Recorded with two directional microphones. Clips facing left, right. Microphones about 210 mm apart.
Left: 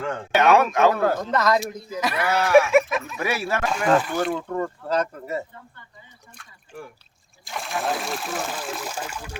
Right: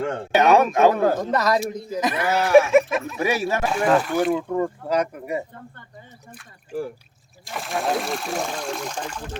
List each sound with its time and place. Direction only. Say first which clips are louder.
0.0 s a man's voice: right 3 dB; 30° right (ahead or behind)
0.3 s speech: right 1 dB; 15° right (ahead or behind)
1.5 s goat: right 1 dB; 35° right (ahead or behind)
2.0 s speech: right 1 dB; 20° right (ahead or behind)
2.3 s goat: right 2 dB; 35° right (ahead or behind)
3.2 s speech: right 3 dB; 20° right (ahead or behind)
3.8 s speech: right 2 dB; centre (ahead or behind)
6.3 s speech: right 11 dB; 5° right (ahead or behind)